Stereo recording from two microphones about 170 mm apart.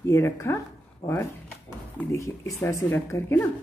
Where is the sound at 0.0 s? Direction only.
15° left (ahead or behind).